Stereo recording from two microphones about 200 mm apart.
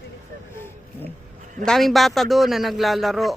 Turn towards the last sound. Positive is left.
turn(degrees=0)  # may be behind; listen again after turning